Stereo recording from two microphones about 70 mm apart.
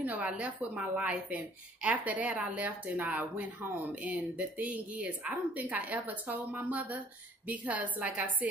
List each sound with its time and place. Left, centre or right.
0.0 s a woman's voice: right